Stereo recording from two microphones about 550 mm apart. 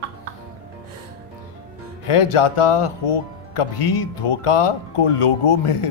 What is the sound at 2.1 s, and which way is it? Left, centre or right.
Speech, left.